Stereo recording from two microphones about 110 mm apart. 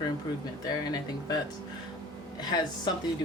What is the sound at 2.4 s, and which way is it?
Speech, 40° left (ahead or behind).